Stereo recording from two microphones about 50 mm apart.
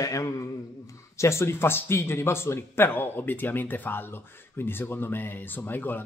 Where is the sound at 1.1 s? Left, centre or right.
Left.